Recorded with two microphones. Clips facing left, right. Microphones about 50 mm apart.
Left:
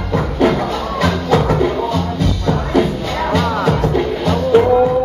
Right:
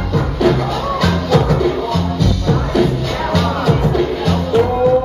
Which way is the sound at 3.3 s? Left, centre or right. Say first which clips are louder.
Even; left.